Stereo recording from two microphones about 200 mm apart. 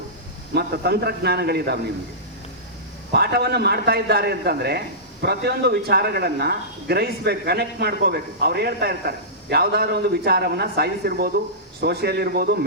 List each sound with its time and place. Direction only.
0.5 s speech: 55° right (ahead or behind)
3.1 s speech: 50° right (ahead or behind)